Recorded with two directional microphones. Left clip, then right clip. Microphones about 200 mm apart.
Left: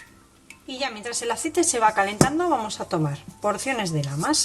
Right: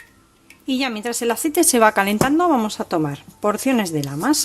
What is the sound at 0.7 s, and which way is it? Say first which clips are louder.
Speech: right 6 dB; 55° right (ahead or behind).